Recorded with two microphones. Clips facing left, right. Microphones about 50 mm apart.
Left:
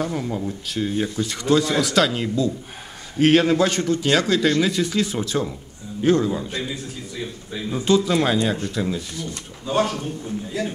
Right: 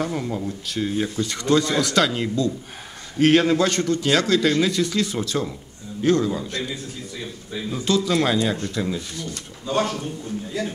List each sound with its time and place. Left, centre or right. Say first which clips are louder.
0.0 s a man's voice: even; centre
6.7 s speech: left 1 dB; centre
7.7 s a man's voice: left 2 dB; centre